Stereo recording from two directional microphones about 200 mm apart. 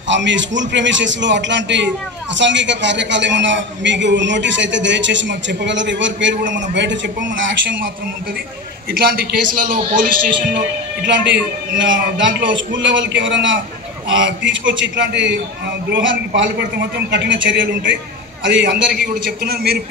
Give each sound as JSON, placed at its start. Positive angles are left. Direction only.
{"t": 0.1, "sound": "a man's voice", "side_deg": -65}
{"t": 8.9, "sound": "a man's voice", "side_deg": -50}
{"t": 11.1, "sound": "a man's voice", "side_deg": -65}